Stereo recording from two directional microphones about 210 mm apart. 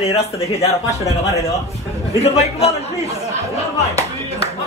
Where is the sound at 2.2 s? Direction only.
30° left (ahead or behind).